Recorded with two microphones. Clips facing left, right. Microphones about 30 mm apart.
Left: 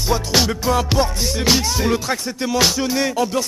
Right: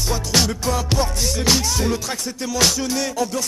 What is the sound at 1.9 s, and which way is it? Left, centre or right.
Music, left.